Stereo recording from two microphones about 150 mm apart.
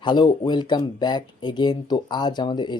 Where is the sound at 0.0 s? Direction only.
30° left (ahead or behind).